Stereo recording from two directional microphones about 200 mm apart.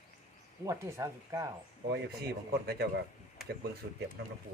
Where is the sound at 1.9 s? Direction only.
55° right (ahead or behind).